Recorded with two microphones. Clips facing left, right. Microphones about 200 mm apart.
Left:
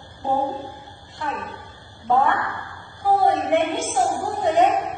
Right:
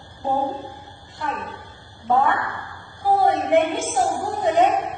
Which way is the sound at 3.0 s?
Centre (ahead or behind).